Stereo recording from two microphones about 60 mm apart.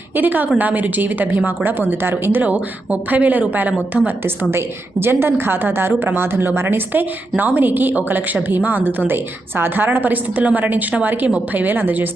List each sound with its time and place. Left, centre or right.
0.2 s a woman's voice: right
2.4 s speech: right
4.5 s a woman's voice: right